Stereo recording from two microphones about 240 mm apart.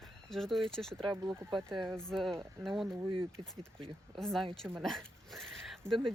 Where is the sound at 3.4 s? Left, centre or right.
Centre.